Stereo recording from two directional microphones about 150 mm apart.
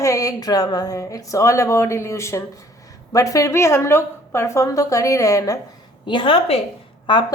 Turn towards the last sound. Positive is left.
turn(degrees=30)  # may be behind; listen again after turning